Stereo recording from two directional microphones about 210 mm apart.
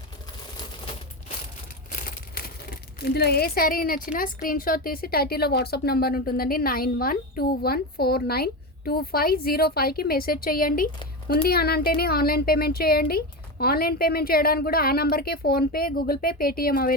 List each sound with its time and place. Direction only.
1.9 s speech: 45° left (ahead or behind)